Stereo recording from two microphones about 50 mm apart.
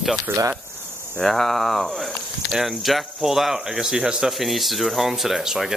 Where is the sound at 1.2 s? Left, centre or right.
Centre.